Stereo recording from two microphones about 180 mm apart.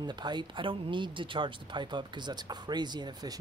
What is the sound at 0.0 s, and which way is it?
Speech, 25° right (ahead or behind).